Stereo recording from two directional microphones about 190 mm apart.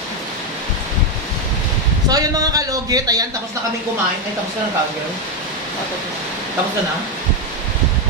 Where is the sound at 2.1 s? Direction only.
20° right (ahead or behind).